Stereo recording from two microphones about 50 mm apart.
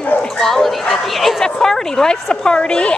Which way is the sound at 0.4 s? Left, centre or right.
Centre.